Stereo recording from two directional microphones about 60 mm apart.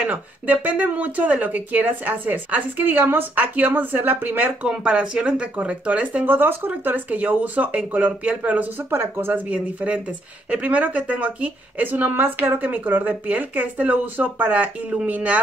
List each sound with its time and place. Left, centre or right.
0.0 s a woman's voice: right
4.6 s a woman's voice: centre
8.9 s speech: right
9.3 s a woman's voice: right